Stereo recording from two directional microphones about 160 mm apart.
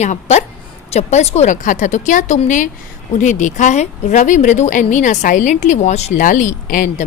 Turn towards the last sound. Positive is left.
turn(degrees=50)  # may be behind; listen again after turning